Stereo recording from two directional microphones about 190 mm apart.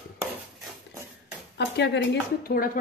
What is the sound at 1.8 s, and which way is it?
Speech, 60° left (ahead or behind).